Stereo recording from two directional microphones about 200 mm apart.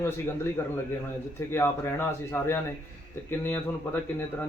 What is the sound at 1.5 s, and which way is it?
Speech, 10° left (ahead or behind).